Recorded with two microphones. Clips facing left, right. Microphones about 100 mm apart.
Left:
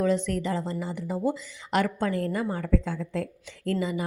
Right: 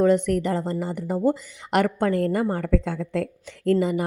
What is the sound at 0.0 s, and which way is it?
Speech, 55° right (ahead or behind).